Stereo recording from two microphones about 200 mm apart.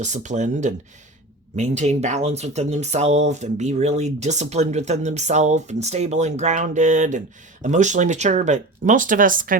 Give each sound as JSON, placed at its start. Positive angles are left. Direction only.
{"t": 0.0, "sound": "speech", "side_deg": -35}